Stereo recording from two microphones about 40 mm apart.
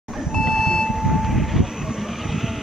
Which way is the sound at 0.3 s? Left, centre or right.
Centre.